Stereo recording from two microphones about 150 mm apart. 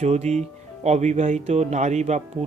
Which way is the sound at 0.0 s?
50° right (ahead or behind).